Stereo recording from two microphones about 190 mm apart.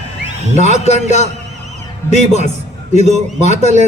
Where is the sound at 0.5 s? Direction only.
35° left (ahead or behind).